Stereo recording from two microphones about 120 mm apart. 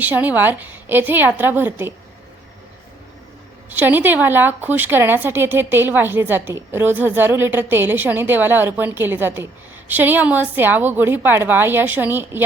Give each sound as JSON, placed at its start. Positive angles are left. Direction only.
{"t": 0.0, "sound": "speech", "side_deg": -15}
{"t": 3.7, "sound": "speech", "side_deg": -15}